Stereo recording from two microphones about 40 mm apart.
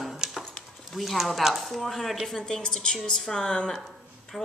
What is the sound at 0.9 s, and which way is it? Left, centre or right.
A woman's voice, centre.